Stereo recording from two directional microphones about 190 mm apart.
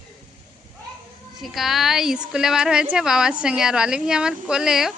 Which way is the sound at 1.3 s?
Centre (ahead or behind).